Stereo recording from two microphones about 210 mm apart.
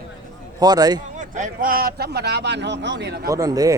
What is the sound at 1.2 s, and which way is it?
Speech, 35° right (ahead or behind).